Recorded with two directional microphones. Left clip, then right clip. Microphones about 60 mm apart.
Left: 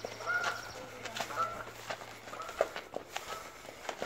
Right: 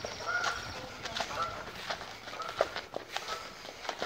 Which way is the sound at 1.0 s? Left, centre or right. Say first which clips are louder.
Right 3 dB; left.